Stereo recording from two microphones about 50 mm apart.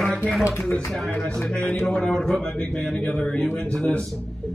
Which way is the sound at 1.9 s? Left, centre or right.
Centre.